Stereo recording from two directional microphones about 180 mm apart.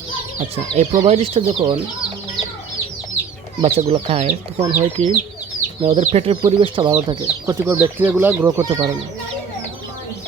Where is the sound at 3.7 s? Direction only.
35° right (ahead or behind).